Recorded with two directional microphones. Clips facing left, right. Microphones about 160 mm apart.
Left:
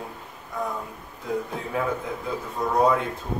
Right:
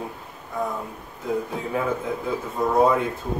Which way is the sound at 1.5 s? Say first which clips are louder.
Right 2 dB; centre (ahead or behind).